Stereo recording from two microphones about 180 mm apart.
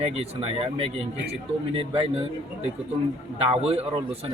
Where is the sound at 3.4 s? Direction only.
35° right (ahead or behind).